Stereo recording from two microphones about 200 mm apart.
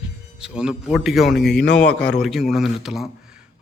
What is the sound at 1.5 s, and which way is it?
Speech, 55° left (ahead or behind).